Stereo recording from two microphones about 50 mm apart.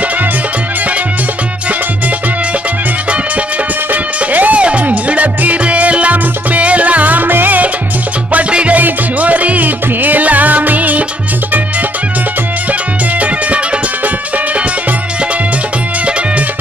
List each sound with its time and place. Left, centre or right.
3.9 s music: right
8.3 s music: right